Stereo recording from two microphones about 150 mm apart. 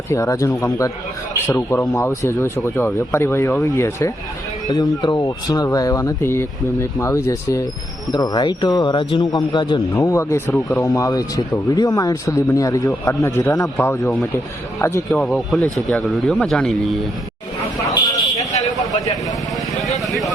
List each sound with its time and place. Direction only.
0.1 s speech: 20° left (ahead or behind)
9.9 s speech: 20° left (ahead or behind)
15.3 s speech: centre (ahead or behind)
18.5 s a sound: 45° left (ahead or behind)
20.0 s vehicle: centre (ahead or behind)